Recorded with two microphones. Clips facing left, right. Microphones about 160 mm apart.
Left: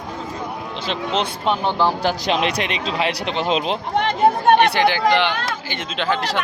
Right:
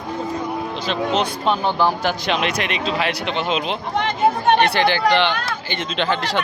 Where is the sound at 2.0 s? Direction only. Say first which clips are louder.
Left 1 dB; 35° left (ahead or behind).